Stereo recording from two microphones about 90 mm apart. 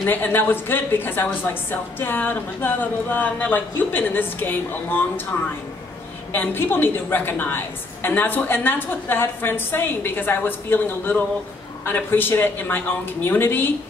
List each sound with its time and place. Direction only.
0.0 s a woman's voice: 20° left (ahead or behind)
6.3 s a woman's voice: 25° left (ahead or behind)